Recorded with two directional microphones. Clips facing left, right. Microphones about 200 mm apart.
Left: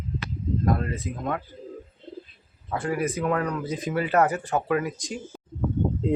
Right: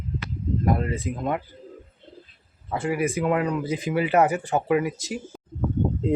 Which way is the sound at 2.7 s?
10° right (ahead or behind).